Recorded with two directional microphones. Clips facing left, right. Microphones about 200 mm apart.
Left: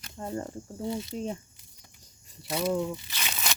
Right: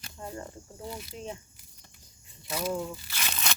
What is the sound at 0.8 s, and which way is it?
Speech, 25° left (ahead or behind).